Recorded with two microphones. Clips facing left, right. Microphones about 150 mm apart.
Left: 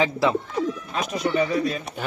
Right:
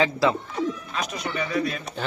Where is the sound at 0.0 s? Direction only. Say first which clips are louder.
Even; 15° left (ahead or behind).